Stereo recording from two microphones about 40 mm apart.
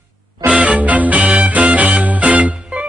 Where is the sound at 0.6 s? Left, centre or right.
Right.